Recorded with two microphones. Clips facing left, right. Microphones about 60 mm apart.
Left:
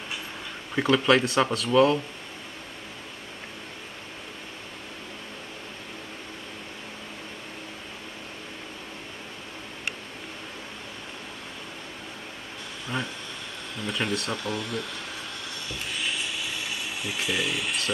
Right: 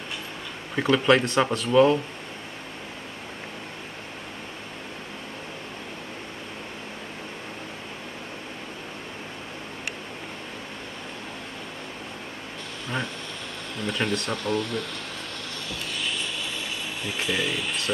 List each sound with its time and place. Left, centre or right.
0.7 s speech: centre
13.8 s speech: centre
16.0 s a sound: centre